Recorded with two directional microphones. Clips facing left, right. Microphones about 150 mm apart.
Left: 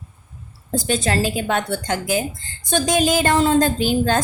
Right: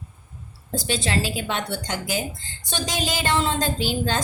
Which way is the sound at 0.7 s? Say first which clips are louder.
Left 4 dB; 50° left (ahead or behind).